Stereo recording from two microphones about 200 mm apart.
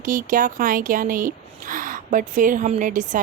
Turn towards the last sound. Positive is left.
turn(degrees=-40)  # may be behind; listen again after turning